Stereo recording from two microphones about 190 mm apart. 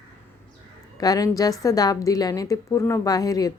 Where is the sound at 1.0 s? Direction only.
20° left (ahead or behind).